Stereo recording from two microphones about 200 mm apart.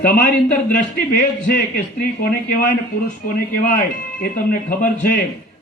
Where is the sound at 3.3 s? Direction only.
45° left (ahead or behind).